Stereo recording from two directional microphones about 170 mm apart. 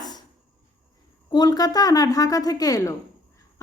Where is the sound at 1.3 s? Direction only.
20° left (ahead or behind).